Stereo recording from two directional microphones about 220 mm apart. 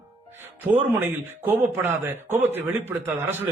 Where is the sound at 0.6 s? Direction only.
10° right (ahead or behind).